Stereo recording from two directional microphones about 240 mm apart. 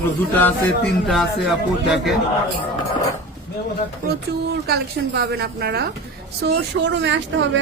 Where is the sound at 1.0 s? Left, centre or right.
Centre.